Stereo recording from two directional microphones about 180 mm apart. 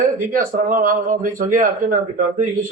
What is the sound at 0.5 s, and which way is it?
Speech, 50° right (ahead or behind).